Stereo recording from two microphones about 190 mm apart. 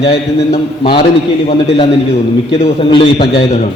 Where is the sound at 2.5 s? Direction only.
30° left (ahead or behind).